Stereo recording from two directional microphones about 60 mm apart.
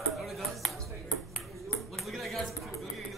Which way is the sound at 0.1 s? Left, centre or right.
Centre.